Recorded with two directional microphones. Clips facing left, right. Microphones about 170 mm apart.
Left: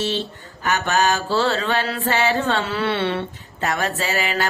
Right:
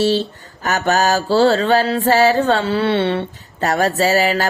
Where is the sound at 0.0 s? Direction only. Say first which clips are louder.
Right 8 dB; 35° right (ahead or behind).